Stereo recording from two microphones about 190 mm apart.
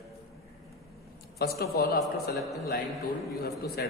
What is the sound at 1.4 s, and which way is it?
Speech, 55° left (ahead or behind).